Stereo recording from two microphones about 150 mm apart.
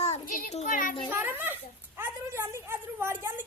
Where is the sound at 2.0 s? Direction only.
15° right (ahead or behind).